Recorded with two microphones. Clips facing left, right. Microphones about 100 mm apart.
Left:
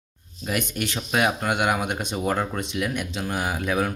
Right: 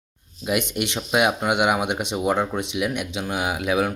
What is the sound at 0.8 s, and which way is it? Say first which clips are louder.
Speech: right 1 dB; 15° right (ahead or behind).